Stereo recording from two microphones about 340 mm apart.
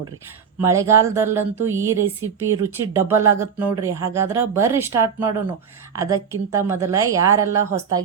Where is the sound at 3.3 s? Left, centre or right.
Centre.